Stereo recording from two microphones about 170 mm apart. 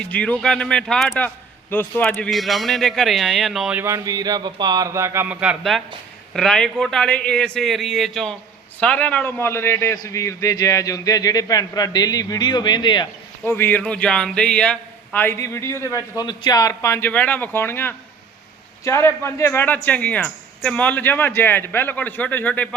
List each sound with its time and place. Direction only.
0.0 s a man's voice: 10° left (ahead or behind); by 13.1 s 25° left (ahead or behind)
13.4 s a man's voice: 15° left (ahead or behind)